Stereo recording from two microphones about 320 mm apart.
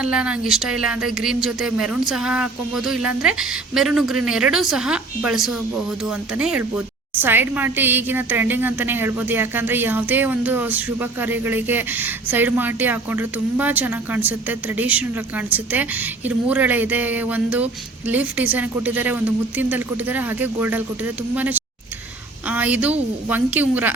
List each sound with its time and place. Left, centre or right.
0.0 s a woman's voice: centre